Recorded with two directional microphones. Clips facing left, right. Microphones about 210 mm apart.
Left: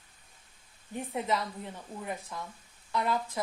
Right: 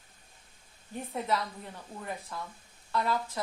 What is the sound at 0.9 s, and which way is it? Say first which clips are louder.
Speech: left 1 dB; 15° left (ahead or behind).